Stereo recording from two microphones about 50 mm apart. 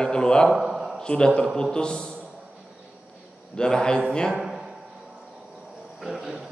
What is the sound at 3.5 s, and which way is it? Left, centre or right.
Speech, centre.